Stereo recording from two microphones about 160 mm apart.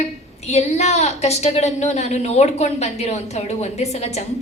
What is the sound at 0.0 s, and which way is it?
A woman's voice, 45° left (ahead or behind).